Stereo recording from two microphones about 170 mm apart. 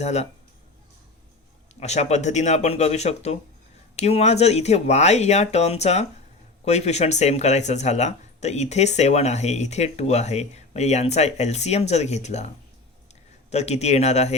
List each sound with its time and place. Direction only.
0.0 s speech: 40° left (ahead or behind)
1.8 s speech: 40° left (ahead or behind)
13.5 s speech: 40° left (ahead or behind)